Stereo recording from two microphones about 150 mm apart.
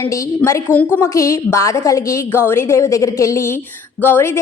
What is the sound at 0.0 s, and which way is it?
A woman's voice, 20° left (ahead or behind).